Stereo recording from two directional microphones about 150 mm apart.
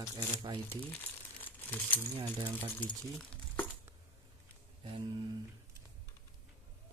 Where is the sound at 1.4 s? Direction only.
10° left (ahead or behind).